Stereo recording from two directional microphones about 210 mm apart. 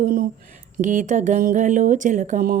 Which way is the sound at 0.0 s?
45° right (ahead or behind).